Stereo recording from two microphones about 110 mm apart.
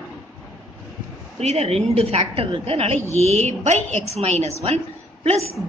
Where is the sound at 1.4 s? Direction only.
75° right (ahead or behind).